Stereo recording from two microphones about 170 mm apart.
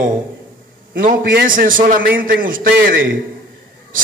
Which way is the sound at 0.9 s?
55° right (ahead or behind).